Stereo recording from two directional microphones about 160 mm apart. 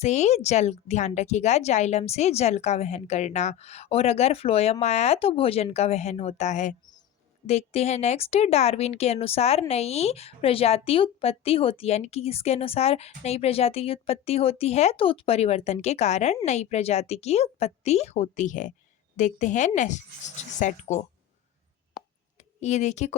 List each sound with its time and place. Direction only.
0.0 s speech: 45° left (ahead or behind)
22.4 s speech: 45° left (ahead or behind)